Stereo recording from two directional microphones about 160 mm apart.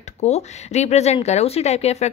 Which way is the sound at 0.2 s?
45° left (ahead or behind).